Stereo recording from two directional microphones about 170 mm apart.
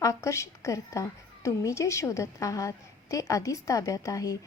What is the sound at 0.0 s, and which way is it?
A woman's voice, 20° left (ahead or behind).